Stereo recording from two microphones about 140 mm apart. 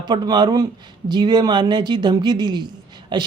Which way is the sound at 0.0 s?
30° right (ahead or behind).